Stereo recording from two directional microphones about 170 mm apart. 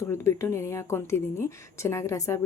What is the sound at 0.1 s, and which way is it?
Speech, 15° left (ahead or behind).